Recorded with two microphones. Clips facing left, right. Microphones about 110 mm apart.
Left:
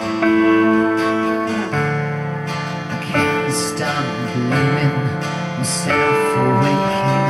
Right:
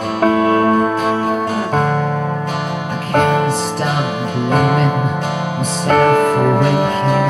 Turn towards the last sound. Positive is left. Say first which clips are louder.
# right 2 dB
turn(degrees=-45)  # may be behind; listen again after turning